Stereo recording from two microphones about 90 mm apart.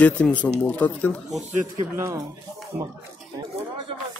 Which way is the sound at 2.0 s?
30° right (ahead or behind).